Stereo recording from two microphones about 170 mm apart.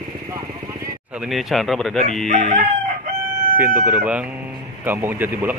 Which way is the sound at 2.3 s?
40° right (ahead or behind).